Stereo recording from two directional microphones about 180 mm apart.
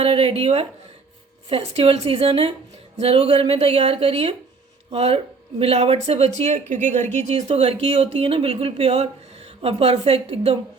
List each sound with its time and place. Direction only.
0.0 s speech: 30° right (ahead or behind)